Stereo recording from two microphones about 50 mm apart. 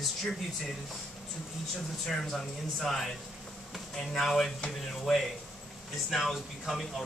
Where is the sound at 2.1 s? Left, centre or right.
Centre.